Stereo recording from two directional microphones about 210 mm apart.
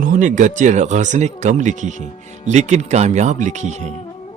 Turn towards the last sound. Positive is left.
turn(degrees=-35)  # may be behind; listen again after turning